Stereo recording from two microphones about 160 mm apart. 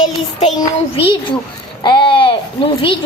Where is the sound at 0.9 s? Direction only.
30° left (ahead or behind).